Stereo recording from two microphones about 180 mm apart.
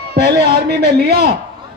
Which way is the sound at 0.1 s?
65° right (ahead or behind).